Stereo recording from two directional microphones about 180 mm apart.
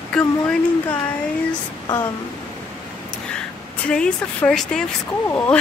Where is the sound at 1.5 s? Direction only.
20° left (ahead or behind).